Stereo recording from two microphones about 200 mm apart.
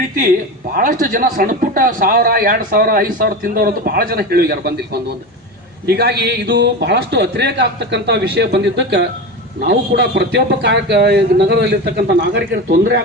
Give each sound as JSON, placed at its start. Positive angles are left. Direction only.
{"t": 0.7, "sound": "a man's voice", "side_deg": -45}